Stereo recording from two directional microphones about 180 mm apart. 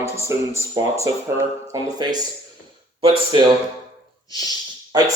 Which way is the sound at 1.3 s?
20° right (ahead or behind).